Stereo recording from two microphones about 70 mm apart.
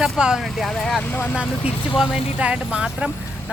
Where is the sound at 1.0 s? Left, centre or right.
Left.